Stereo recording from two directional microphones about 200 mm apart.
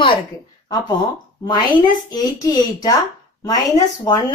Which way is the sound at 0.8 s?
20° left (ahead or behind).